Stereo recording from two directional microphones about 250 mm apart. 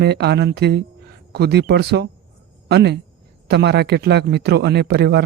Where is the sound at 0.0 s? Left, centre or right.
Right.